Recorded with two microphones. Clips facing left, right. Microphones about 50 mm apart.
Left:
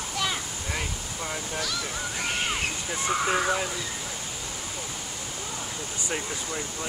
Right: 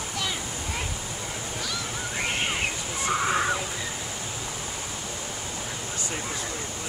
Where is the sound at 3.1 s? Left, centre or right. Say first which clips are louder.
Even; centre.